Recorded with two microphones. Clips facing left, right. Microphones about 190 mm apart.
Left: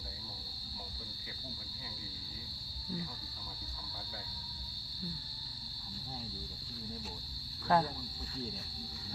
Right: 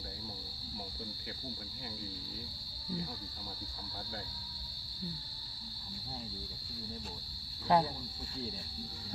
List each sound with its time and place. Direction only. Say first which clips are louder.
7.7 s speech: right 1 dB; 20° right (ahead or behind)